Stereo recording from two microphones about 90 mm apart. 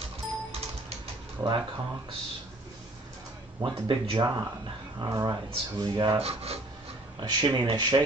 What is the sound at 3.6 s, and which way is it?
Speech, 65° right (ahead or behind).